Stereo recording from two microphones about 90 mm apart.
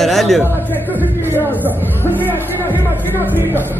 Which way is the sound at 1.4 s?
20° left (ahead or behind).